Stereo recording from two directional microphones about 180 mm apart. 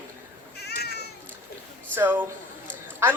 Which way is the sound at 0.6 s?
65° left (ahead or behind).